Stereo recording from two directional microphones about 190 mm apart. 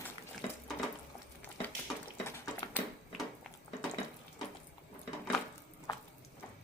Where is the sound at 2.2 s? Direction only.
15° left (ahead or behind).